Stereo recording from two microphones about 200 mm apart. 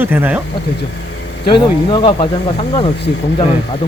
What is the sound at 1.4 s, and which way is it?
Speech, 25° left (ahead or behind).